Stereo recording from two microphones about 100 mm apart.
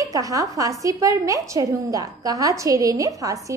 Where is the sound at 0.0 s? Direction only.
35° right (ahead or behind).